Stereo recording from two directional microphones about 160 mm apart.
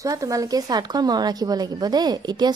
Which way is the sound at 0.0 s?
20° right (ahead or behind).